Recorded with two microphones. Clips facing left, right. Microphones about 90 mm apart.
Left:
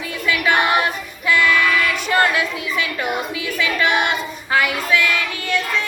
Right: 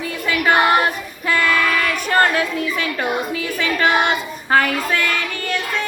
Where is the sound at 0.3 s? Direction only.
40° right (ahead or behind).